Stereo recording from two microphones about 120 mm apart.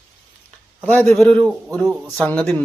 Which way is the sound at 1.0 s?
Centre (ahead or behind).